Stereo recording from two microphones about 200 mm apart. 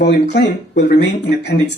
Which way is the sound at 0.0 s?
55° left (ahead or behind).